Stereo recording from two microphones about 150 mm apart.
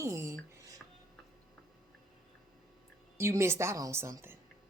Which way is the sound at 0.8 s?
Centre (ahead or behind).